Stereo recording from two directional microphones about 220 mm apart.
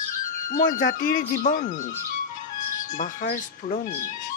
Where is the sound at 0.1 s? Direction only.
35° left (ahead or behind).